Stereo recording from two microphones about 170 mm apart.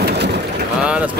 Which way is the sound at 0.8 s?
5° right (ahead or behind).